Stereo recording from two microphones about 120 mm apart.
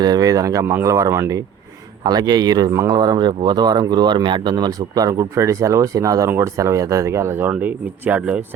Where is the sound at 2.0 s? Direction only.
35° right (ahead or behind).